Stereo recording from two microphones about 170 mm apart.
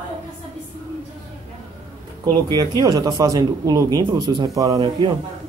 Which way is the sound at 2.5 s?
25° right (ahead or behind).